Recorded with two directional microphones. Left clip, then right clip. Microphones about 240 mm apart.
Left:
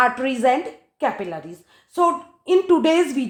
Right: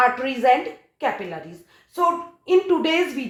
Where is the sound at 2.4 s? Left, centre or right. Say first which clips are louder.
Left 2 dB; left.